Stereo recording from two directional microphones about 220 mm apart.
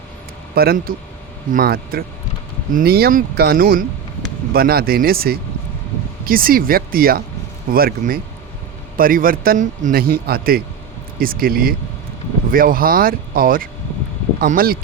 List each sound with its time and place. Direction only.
0.5 s a man's voice: 45° right (ahead or behind)